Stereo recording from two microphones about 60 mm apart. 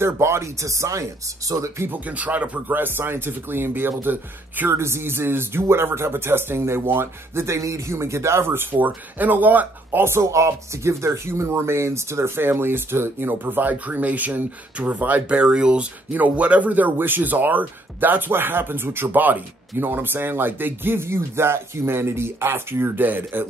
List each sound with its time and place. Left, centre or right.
0.0 s speech: right
1.9 s speech: right
4.7 s speech: right
8.7 s speech: right
9.8 s speech: right